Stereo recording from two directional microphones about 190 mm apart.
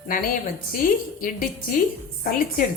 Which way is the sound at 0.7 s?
45° left (ahead or behind).